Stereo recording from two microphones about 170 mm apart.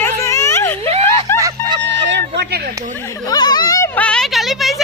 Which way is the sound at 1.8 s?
90° right.